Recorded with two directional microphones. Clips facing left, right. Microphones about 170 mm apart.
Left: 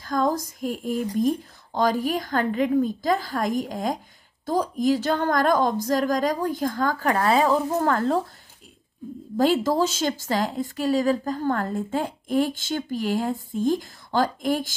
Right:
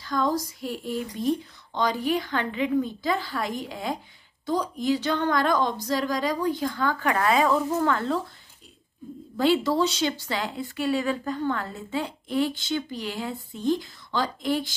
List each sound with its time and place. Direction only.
0.0 s a woman's voice: 50° left (ahead or behind)
9.4 s a woman's voice: 40° left (ahead or behind)